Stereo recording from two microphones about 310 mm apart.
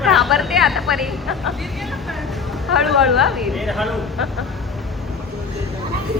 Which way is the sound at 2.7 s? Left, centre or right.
Centre.